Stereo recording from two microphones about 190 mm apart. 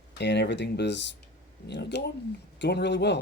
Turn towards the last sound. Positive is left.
turn(degrees=65)  # may be behind; listen again after turning